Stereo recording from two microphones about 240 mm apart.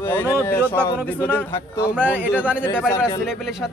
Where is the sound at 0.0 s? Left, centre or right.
Centre.